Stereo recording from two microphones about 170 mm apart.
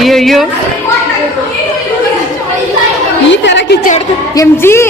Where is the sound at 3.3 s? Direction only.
90° left; by 3.9 s 75° left (ahead or behind).